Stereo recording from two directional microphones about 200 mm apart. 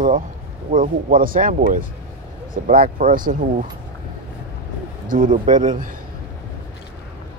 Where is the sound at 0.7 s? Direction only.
45° right (ahead or behind).